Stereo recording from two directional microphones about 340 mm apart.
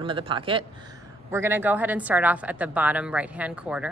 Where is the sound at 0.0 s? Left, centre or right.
Centre.